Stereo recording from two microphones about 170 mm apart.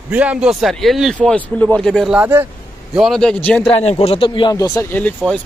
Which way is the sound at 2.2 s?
10° right (ahead or behind).